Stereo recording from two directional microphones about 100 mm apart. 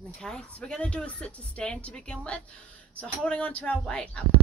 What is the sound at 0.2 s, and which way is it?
A woman's voice, 10° left (ahead or behind).